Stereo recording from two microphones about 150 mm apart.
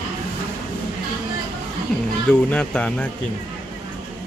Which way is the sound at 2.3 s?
10° left (ahead or behind).